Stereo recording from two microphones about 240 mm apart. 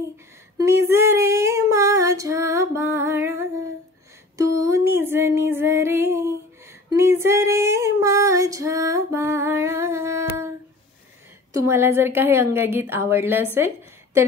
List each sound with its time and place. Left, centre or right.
0.6 s female singing: centre
4.4 s music: centre
11.5 s a woman's voice: centre